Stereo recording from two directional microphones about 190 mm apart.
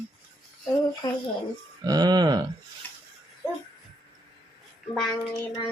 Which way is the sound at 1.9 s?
20° right (ahead or behind).